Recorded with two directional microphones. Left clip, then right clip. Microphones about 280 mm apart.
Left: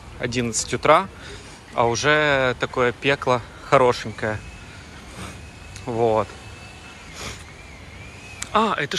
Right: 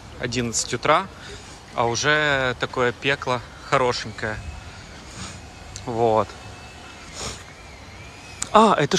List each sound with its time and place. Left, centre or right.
0.2 s speech: centre
5.9 s speech: centre
8.4 s speech: centre